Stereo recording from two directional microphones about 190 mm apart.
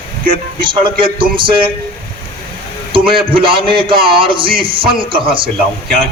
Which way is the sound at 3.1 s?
30° right (ahead or behind).